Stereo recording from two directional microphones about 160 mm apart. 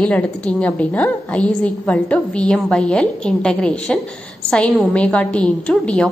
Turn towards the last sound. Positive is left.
turn(degrees=5)  # may be behind; listen again after turning